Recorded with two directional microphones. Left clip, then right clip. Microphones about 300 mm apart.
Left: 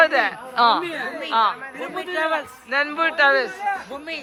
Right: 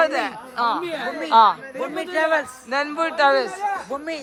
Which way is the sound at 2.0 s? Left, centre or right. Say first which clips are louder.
Right 2 dB; right.